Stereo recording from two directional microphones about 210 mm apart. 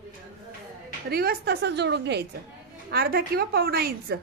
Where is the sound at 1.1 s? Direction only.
50° right (ahead or behind).